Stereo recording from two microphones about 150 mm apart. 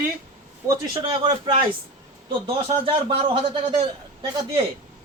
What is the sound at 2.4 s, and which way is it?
Speech, 40° right (ahead or behind).